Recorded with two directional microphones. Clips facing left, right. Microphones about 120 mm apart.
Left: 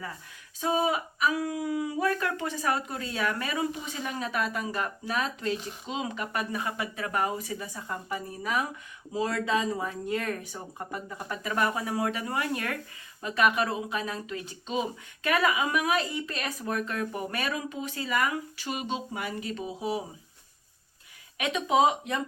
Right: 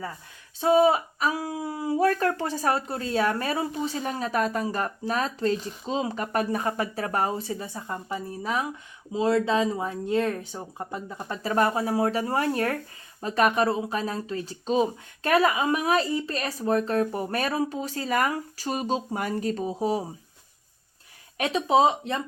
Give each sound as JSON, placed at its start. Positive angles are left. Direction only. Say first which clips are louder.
{"t": 0.6, "sound": "speech", "louder": "right 7 dB", "side_deg": -35}
{"t": 21.3, "sound": "speech", "louder": "right 3 dB", "side_deg": -35}